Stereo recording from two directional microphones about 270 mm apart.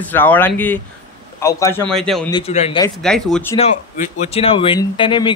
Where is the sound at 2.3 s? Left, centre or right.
Left.